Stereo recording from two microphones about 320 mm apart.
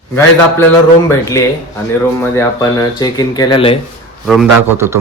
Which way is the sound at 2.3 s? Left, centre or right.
Centre.